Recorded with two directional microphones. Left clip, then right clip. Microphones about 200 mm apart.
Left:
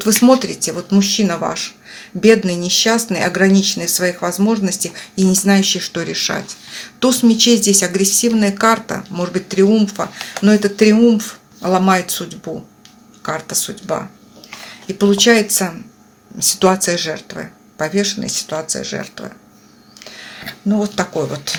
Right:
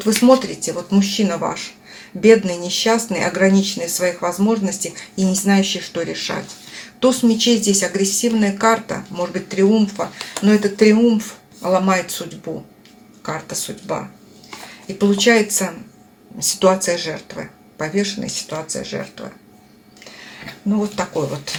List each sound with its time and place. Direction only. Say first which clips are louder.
0.2 s speech: even; 40° left (ahead or behind)
13.2 s speech: left 4 dB; 40° left (ahead or behind)
14.9 s speech: left 2 dB; 40° left (ahead or behind)